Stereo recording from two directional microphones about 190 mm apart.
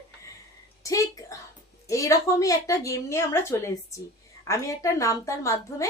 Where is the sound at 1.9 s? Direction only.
15° left (ahead or behind).